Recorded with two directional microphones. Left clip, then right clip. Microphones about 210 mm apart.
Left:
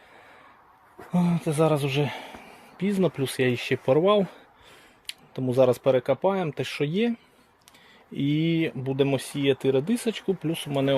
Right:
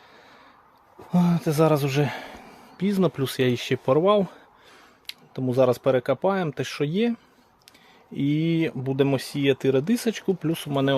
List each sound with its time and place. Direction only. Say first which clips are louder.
1.1 s a man's voice: right 3 dB; 20° right (ahead or behind)
3.8 s speech: right 1 dB; 5° right (ahead or behind)